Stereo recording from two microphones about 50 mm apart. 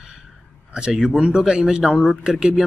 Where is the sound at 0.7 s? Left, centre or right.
Centre.